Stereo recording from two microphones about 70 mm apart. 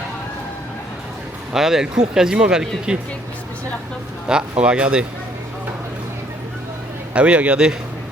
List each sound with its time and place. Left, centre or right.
1.5 s speech: centre
4.3 s speech: centre
7.1 s speech: centre